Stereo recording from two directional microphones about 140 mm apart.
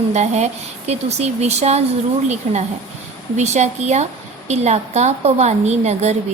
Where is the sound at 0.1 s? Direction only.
55° right (ahead or behind).